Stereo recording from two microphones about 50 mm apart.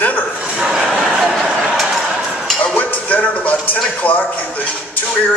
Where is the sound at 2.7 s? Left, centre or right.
Left.